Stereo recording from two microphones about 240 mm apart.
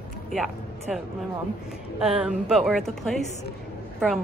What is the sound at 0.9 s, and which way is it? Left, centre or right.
A woman's voice, centre.